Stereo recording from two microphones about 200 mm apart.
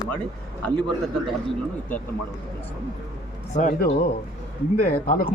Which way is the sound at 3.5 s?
40° left (ahead or behind).